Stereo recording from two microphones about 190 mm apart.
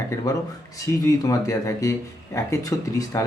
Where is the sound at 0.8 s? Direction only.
20° left (ahead or behind).